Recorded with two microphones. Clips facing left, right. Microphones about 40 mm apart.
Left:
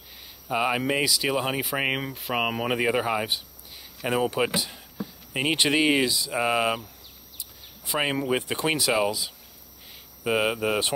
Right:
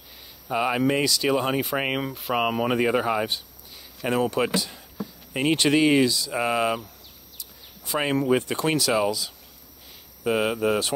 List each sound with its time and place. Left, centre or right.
0.5 s speech: centre
7.9 s speech: centre